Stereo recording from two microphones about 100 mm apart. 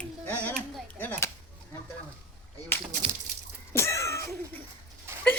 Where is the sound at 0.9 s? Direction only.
20° left (ahead or behind).